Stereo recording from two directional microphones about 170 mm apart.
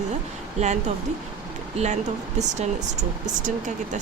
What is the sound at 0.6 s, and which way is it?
Speech, 40° right (ahead or behind).